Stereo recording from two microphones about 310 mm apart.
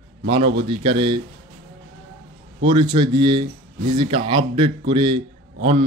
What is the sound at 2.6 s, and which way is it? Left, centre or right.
A man's voice, centre.